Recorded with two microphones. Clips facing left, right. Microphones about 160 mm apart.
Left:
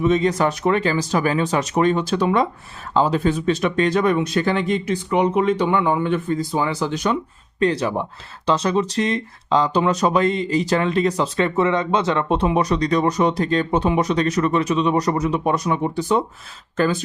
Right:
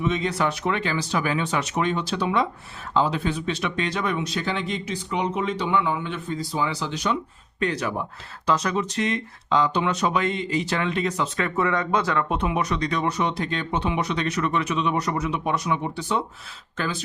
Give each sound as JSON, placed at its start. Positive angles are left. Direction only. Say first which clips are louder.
{"t": 0.0, "sound": "speech", "louder": "left 6 dB", "side_deg": 40}
{"t": 7.6, "sound": "speech", "louder": "left 6 dB", "side_deg": 30}